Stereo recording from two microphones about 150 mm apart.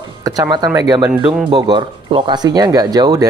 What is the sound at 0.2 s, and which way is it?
Speech, 25° right (ahead or behind).